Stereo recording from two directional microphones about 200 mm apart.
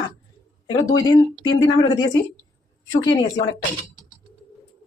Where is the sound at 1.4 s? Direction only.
20° left (ahead or behind).